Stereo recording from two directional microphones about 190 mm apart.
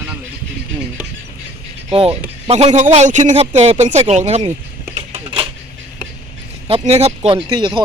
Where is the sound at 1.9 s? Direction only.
30° right (ahead or behind).